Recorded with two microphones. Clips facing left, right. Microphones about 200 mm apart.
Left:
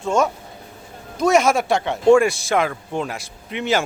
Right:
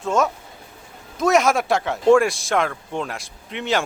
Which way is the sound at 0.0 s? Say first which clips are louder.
Left 1 dB; centre (ahead or behind).